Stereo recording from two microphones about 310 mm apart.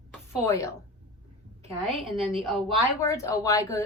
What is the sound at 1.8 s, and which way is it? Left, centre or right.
A woman's voice, centre.